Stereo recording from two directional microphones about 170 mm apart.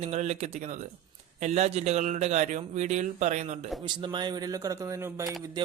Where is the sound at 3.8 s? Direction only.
25° right (ahead or behind).